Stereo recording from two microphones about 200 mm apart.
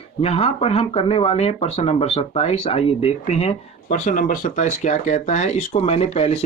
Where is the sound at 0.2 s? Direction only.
30° left (ahead or behind).